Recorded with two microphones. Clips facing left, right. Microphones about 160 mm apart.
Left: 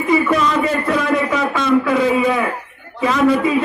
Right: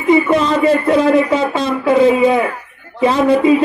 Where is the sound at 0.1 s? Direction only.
30° right (ahead or behind).